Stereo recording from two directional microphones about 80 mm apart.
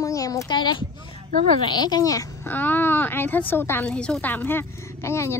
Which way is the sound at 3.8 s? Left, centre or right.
Centre.